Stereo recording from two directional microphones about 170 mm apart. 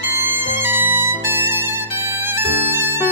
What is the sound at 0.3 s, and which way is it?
Music, 10° right (ahead or behind).